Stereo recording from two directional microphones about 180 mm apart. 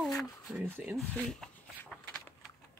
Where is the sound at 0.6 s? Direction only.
5° right (ahead or behind).